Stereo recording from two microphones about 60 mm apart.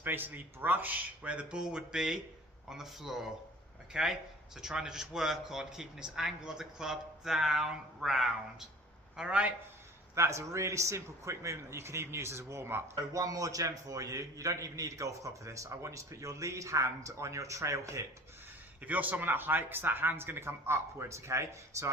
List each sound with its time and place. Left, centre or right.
0.0 s a man's voice: right; by 8.3 s centre
9.1 s speech: centre
10.2 s a man's voice: right
13.1 s a man's voice: right
18.8 s speech: right